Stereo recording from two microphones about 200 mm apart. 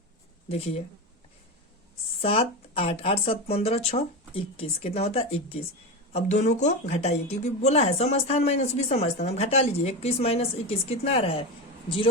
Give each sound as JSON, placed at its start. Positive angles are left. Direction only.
{"t": 0.4, "sound": "speech", "side_deg": 30}
{"t": 2.2, "sound": "speech", "side_deg": 30}